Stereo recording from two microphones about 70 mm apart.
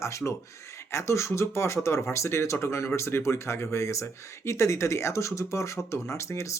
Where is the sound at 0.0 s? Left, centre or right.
Left.